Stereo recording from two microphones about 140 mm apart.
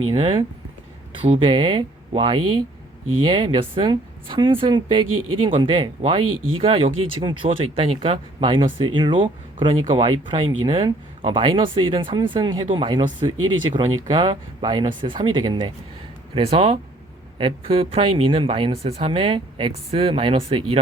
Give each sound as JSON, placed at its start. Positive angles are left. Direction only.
{"t": 0.2, "sound": "a woman's voice", "side_deg": -40}